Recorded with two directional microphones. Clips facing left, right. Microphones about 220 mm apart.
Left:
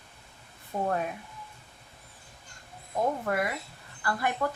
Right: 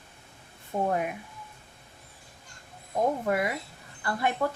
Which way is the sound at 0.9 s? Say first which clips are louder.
Even; 15° right (ahead or behind).